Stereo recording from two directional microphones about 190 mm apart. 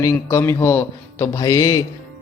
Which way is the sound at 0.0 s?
15° left (ahead or behind).